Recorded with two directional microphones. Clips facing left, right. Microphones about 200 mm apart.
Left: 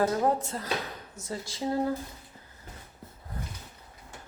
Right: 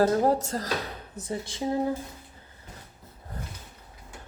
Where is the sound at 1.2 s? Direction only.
60° right (ahead or behind).